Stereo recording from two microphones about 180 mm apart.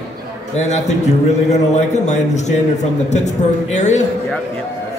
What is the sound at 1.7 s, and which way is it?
Speech, 40° left (ahead or behind).